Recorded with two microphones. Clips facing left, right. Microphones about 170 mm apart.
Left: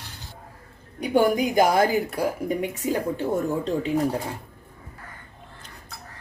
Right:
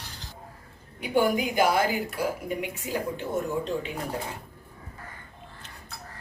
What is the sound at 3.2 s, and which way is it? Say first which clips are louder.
Speech: left 4 dB; 35° left (ahead or behind).